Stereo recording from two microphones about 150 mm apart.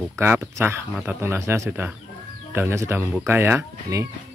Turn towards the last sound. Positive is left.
turn(degrees=-20)  # may be behind; listen again after turning